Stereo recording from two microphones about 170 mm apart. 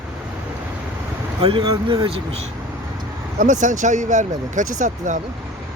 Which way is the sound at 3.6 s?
45° right (ahead or behind).